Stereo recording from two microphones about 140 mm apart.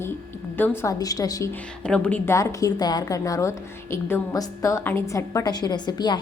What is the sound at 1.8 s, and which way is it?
Speech, 10° left (ahead or behind).